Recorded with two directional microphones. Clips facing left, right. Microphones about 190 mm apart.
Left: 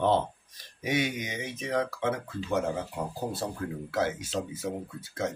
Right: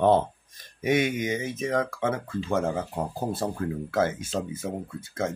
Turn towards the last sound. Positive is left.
turn(degrees=-50)  # may be behind; listen again after turning